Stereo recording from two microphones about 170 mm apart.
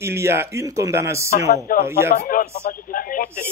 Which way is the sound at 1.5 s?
60° left (ahead or behind).